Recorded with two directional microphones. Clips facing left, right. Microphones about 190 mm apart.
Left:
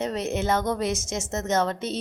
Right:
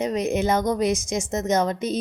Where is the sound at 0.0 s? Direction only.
10° right (ahead or behind).